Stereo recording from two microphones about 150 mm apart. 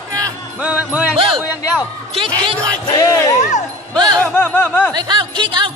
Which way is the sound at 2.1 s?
35° right (ahead or behind).